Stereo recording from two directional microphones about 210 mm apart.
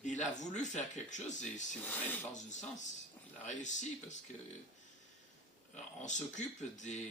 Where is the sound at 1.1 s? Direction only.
35° left (ahead or behind).